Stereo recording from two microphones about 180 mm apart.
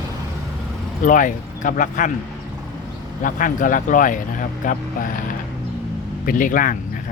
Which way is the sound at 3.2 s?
50° left (ahead or behind).